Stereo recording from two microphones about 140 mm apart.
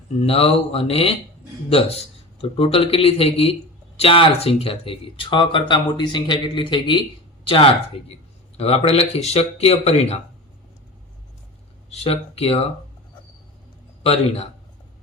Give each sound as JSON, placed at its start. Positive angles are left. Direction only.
{"t": 0.2, "sound": "speech", "side_deg": 45}
{"t": 2.4, "sound": "speech", "side_deg": 45}
{"t": 11.9, "sound": "speech", "side_deg": 45}
{"t": 14.0, "sound": "speech", "side_deg": 45}